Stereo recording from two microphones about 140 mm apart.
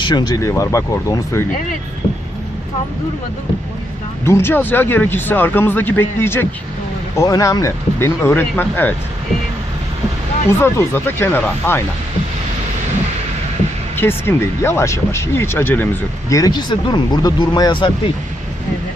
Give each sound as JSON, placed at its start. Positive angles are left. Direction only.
{"t": 0.0, "sound": "speech", "side_deg": 30}
{"t": 4.3, "sound": "speech", "side_deg": 15}
{"t": 10.6, "sound": "speech", "side_deg": 15}
{"t": 13.9, "sound": "speech", "side_deg": 15}